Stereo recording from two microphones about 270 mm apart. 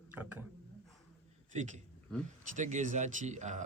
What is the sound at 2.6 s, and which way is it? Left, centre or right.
Speech, right.